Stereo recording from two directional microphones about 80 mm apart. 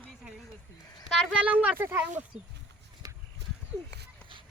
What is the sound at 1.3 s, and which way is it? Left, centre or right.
Speech, centre.